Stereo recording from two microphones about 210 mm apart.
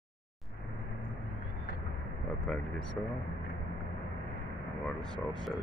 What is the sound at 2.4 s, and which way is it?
Speech, 5° left (ahead or behind).